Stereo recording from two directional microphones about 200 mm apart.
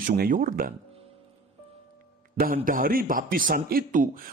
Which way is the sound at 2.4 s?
45° right (ahead or behind).